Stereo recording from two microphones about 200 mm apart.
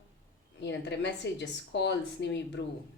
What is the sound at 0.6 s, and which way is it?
A woman's voice, 60° left (ahead or behind).